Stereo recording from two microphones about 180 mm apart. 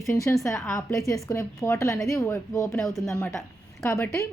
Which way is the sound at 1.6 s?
15° left (ahead or behind).